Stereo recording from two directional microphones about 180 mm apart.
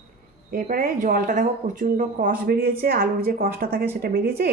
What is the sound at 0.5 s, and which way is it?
A woman's voice, 50° right (ahead or behind).